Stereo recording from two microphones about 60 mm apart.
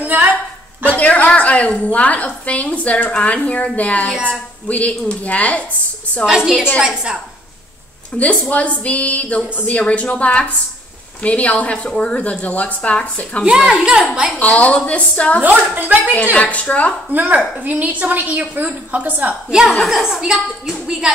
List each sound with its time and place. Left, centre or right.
0.0 s a sound: right
0.9 s a woman's voice: left
6.2 s a woman's voice: centre
8.2 s a woman's voice: left
13.7 s a woman's voice: centre
14.4 s a woman's voice: left
15.4 s a woman's voice: right
16.3 s a woman's voice: left
17.1 s a woman's voice: right
19.7 s a woman's voice: centre